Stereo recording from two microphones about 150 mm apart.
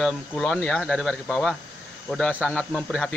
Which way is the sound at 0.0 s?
5° left (ahead or behind).